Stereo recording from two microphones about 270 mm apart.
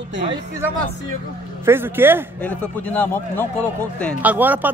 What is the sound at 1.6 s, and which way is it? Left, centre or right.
Speech, centre.